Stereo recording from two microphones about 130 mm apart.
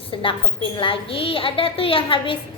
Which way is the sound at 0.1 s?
40° left (ahead or behind).